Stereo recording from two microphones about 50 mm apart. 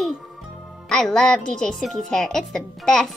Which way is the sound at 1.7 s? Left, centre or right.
Centre.